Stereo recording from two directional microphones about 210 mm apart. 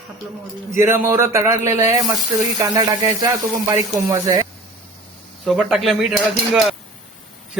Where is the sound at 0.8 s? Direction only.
10° right (ahead or behind).